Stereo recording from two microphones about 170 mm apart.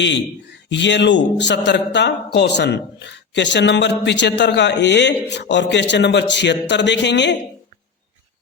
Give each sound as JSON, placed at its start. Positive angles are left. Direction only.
{"t": 0.7, "sound": "speech", "side_deg": 90}